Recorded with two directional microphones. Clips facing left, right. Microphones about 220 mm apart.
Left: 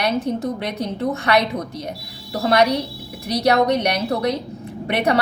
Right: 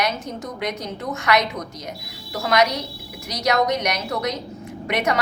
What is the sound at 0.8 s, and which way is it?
A woman's voice, 30° left (ahead or behind).